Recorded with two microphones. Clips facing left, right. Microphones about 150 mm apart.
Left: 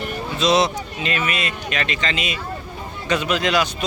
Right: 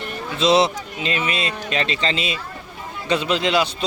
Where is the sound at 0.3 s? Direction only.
25° right (ahead or behind).